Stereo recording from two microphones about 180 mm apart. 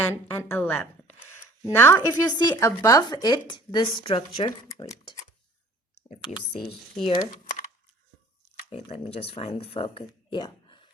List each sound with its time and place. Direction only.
0.1 s a woman's voice: 15° left (ahead or behind)
7.0 s speech: 25° left (ahead or behind)
8.7 s speech: 35° left (ahead or behind)